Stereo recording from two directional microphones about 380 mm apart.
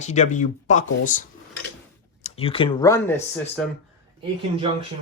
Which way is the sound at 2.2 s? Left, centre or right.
Centre.